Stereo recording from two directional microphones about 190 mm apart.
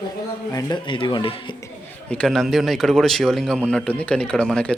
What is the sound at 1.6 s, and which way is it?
A man's voice, 5° left (ahead or behind).